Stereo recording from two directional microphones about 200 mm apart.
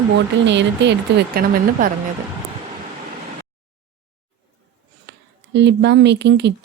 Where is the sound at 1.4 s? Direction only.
50° right (ahead or behind).